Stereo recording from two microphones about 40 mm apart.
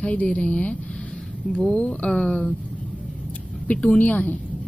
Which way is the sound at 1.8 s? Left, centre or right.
Left.